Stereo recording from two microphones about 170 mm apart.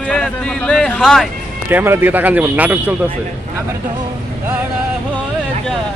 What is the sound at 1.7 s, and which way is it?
Speech, 10° right (ahead or behind).